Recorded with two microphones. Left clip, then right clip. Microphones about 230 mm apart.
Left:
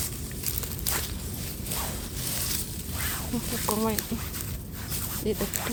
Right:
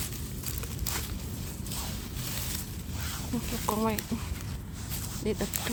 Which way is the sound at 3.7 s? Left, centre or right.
Centre.